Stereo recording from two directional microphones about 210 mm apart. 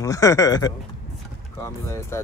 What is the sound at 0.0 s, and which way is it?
Speech, 15° left (ahead or behind).